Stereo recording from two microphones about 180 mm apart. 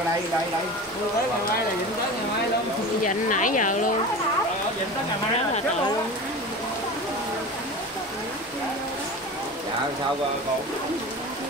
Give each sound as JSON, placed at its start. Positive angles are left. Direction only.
{"t": 3.0, "sound": "speech", "side_deg": 45}